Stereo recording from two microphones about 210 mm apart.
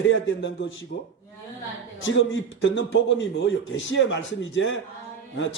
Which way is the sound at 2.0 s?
65° left (ahead or behind).